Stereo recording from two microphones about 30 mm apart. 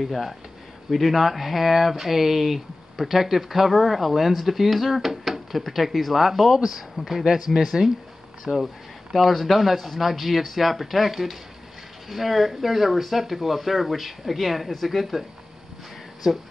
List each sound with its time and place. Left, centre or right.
0.0 s speech: centre
8.5 s speech: left
9.3 s speech: centre